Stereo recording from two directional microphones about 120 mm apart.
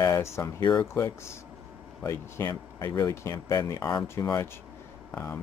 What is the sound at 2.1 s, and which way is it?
Speech, 25° left (ahead or behind).